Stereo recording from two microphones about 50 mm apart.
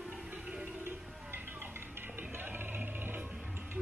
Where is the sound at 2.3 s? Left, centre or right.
Right.